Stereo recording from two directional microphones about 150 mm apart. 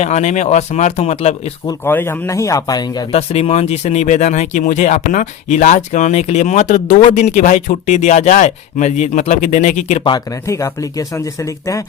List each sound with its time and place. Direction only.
0.0 s speech: 50° left (ahead or behind)
1.8 s speech: 15° left (ahead or behind)
3.1 s speech: 45° left (ahead or behind)
10.4 s speech: 20° left (ahead or behind)